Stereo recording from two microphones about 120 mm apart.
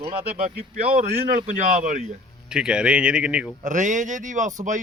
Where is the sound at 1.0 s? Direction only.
90° right.